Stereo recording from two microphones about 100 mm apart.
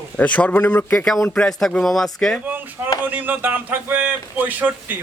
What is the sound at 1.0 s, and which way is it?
Speech, 5° left (ahead or behind).